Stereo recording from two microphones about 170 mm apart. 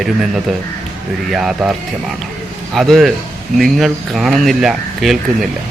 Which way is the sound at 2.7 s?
Centre (ahead or behind).